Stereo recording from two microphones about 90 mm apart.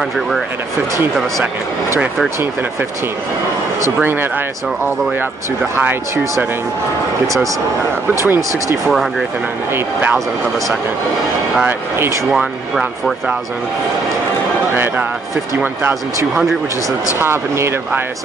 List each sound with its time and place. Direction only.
4.0 s speech: 25° right (ahead or behind)
5.8 s speech: 20° right (ahead or behind)
8.1 s speech: 25° right (ahead or behind)
8.8 s speech: centre (ahead or behind)
12.3 s speech: 5° right (ahead or behind)
17.2 s speech: 30° right (ahead or behind)